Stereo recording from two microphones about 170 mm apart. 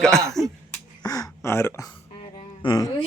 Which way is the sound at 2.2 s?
30° left (ahead or behind).